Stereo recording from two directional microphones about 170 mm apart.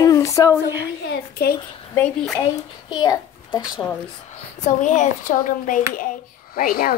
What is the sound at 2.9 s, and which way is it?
Speech, 25° left (ahead or behind).